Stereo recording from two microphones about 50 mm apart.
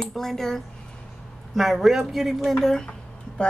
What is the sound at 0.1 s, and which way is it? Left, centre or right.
Speech, centre.